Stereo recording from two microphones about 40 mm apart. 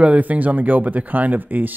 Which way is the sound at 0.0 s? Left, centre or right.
Right.